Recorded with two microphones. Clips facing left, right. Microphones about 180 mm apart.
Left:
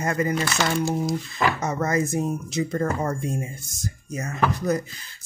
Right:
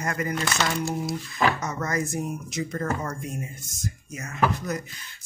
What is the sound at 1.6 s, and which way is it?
Speech, 30° left (ahead or behind).